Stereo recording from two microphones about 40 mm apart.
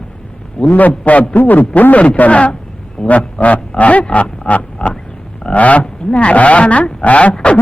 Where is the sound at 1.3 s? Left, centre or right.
Left.